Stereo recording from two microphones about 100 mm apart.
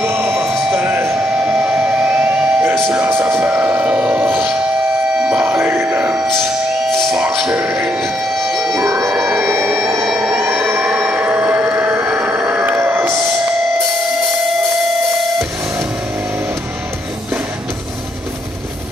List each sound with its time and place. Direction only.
0.0 s music: 20° right (ahead or behind)
0.5 s music: 10° right (ahead or behind)
1.4 s train: 10° right (ahead or behind)
5.2 s music: 10° right (ahead or behind)
8.0 s music: 5° right (ahead or behind)
9.8 s a sound: centre (ahead or behind); by 13.2 s 25° right (ahead or behind)